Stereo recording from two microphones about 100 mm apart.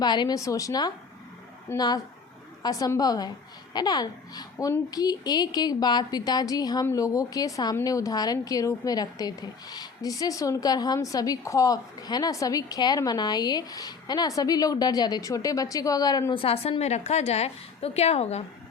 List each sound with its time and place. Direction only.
0.0 s a child's voice: 45° left (ahead or behind)
0.3 s a woman's voice: 30° left (ahead or behind)
4.5 s speech: 25° left (ahead or behind)
4.9 s a woman's voice: 40° left (ahead or behind)
16.3 s a woman's voice: 70° left (ahead or behind); by 18.4 s 90° left